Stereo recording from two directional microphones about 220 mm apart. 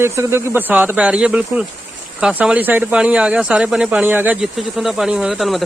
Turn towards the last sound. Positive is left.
turn(degrees=0)  # may be behind; listen again after turning